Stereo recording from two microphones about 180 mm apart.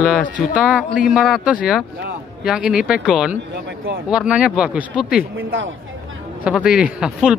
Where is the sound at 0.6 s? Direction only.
5° right (ahead or behind).